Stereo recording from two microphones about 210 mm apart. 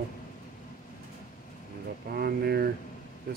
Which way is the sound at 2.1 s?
50° right (ahead or behind).